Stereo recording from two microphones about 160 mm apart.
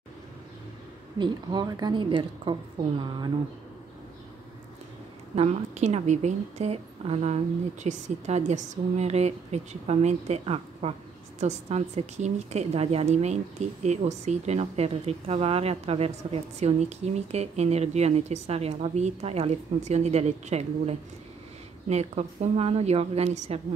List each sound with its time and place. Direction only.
1.1 s a woman's voice: 30° right (ahead or behind)
5.3 s a woman's voice: 40° right (ahead or behind)